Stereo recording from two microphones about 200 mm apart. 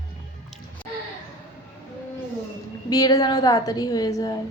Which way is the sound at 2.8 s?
20° left (ahead or behind).